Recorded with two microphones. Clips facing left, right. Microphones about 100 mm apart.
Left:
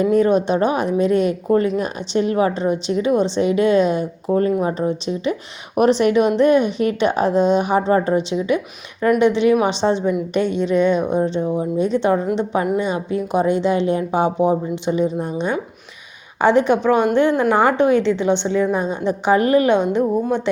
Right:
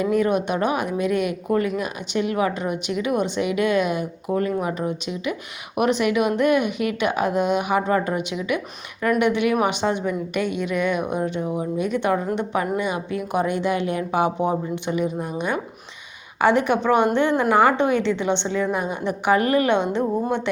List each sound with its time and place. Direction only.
0.0 s a woman's voice: 30° left (ahead or behind)
17.7 s a woman's voice: 20° right (ahead or behind)
18.0 s a woman's voice: 15° left (ahead or behind)